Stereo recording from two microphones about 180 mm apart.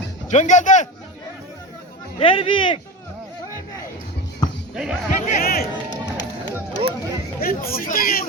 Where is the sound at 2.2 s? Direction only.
30° left (ahead or behind).